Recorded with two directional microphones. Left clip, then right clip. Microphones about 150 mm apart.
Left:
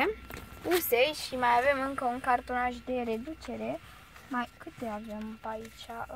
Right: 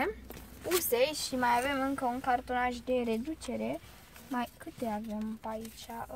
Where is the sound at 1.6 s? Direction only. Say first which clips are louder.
Left 5 dB; 30° left (ahead or behind).